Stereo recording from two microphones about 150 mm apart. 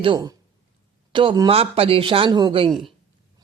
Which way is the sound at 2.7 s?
Centre (ahead or behind).